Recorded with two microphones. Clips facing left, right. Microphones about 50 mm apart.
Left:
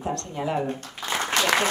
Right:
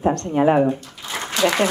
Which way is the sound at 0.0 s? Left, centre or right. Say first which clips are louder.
Right 11 dB; right.